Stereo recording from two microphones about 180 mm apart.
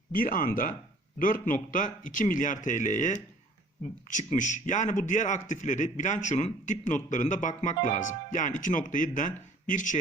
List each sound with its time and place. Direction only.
0.1 s a man's voice: 50° left (ahead or behind)